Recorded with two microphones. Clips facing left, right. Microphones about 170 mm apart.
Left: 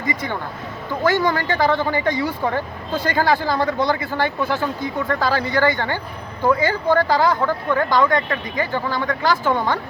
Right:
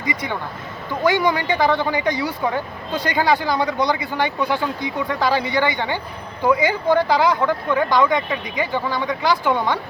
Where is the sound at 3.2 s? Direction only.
15° right (ahead or behind).